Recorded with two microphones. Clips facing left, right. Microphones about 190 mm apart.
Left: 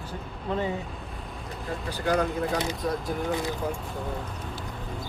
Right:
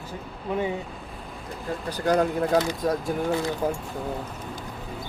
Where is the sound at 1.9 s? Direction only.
40° right (ahead or behind).